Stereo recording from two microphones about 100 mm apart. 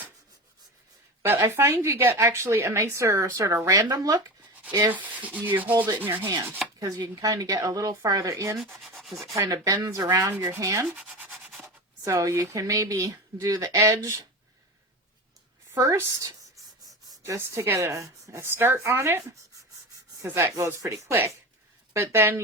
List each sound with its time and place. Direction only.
1.2 s speech: 25° right (ahead or behind)
4.9 s speech: 15° right (ahead or behind)
6.7 s a woman's voice: 35° right (ahead or behind)
8.7 s rub: centre (ahead or behind)
9.3 s a woman's voice: 35° right (ahead or behind)
15.7 s a woman's voice: 35° right (ahead or behind)
17.2 s speech: 30° right (ahead or behind)
20.3 s speech: 25° right (ahead or behind)